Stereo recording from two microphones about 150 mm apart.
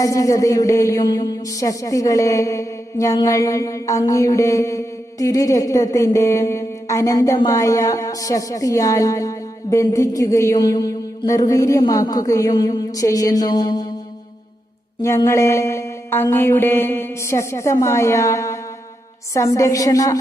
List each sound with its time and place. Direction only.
0.0 s speech: 20° left (ahead or behind)
15.0 s speech: 20° left (ahead or behind)